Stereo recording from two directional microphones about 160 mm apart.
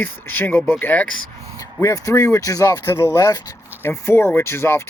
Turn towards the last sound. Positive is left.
turn(degrees=15)  # may be behind; listen again after turning